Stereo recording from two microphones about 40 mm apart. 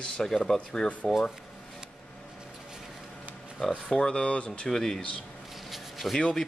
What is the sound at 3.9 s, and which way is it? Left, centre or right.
Speech, centre.